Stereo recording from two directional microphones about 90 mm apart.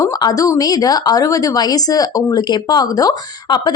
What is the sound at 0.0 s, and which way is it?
A woman's voice, 45° left (ahead or behind).